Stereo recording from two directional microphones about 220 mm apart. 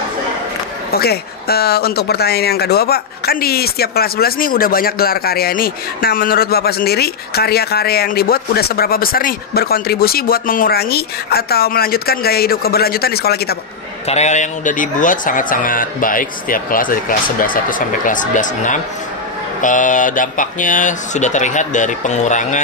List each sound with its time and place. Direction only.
0.9 s speech: 45° left (ahead or behind)
14.0 s speech: 30° left (ahead or behind)